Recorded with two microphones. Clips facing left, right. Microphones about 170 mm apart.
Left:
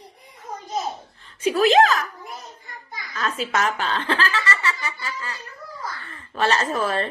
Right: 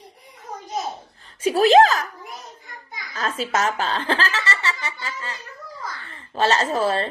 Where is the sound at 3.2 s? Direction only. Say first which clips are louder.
Right 1 dB; 35° right (ahead or behind).